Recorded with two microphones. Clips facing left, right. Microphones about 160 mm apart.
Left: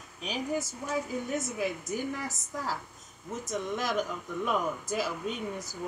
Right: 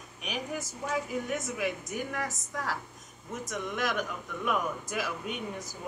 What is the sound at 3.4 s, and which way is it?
Speech, 30° left (ahead or behind).